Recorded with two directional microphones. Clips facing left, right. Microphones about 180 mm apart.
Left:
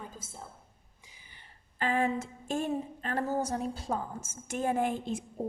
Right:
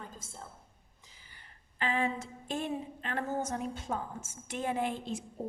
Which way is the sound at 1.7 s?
45° left (ahead or behind).